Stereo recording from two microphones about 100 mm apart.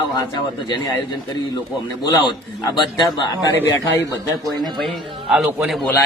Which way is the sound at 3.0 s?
45° left (ahead or behind).